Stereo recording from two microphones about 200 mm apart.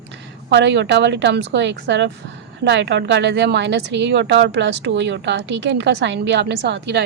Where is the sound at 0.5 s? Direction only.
60° right (ahead or behind).